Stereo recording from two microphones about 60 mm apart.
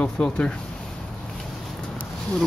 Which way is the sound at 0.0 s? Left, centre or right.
Centre.